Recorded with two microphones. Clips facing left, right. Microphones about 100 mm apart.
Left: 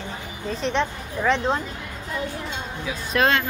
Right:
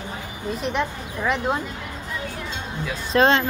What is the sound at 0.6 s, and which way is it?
Speech, 5° right (ahead or behind).